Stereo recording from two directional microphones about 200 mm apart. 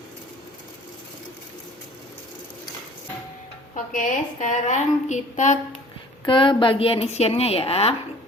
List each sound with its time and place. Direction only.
3.9 s a woman's voice: 40° left (ahead or behind)
6.2 s a woman's voice: 25° left (ahead or behind)